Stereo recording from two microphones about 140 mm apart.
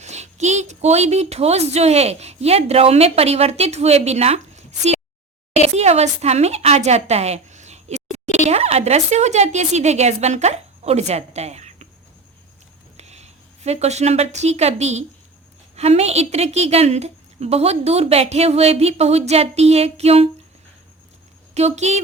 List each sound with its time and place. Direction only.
0.0 s a woman's voice: 55° right (ahead or behind)
13.0 s a woman's voice: 50° right (ahead or behind)
21.5 s a woman's voice: 50° right (ahead or behind)